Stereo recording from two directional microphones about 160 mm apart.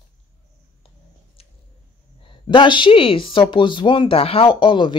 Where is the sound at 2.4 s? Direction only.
30° left (ahead or behind).